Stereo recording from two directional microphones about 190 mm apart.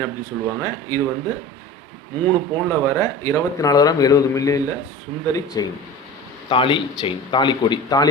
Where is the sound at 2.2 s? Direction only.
15° left (ahead or behind).